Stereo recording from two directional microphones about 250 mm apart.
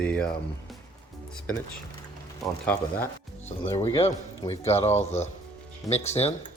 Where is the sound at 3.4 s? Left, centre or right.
Left.